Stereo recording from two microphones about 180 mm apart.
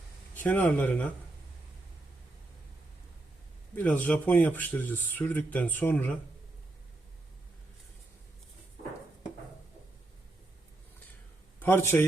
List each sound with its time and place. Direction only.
0.3 s speech: 10° left (ahead or behind)
3.8 s speech: 10° left (ahead or behind)
11.6 s a man's voice: 10° left (ahead or behind)